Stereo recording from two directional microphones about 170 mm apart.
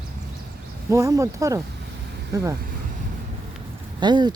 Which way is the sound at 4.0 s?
25° right (ahead or behind).